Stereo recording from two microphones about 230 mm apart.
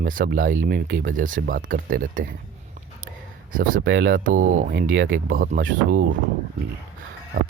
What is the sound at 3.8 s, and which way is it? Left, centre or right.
Speech, right.